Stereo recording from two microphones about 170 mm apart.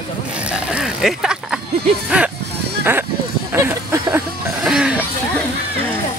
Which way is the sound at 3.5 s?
15° right (ahead or behind).